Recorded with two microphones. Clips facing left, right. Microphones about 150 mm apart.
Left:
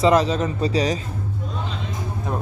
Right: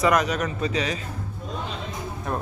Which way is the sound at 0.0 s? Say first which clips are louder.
Left 4 dB; 25° left (ahead or behind).